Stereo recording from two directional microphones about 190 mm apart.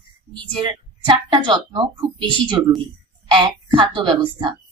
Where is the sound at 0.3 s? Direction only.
25° right (ahead or behind).